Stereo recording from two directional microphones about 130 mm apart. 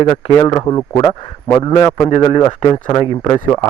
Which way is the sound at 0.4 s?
35° left (ahead or behind).